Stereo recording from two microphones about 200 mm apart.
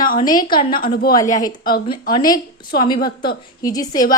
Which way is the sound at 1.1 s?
20° left (ahead or behind).